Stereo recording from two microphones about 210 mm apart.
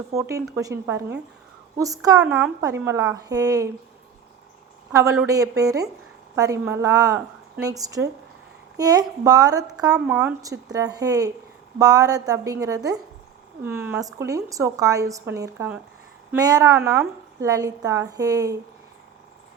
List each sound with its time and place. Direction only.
0.2 s a woman's voice: 15° right (ahead or behind)
4.9 s a woman's voice: 15° right (ahead or behind)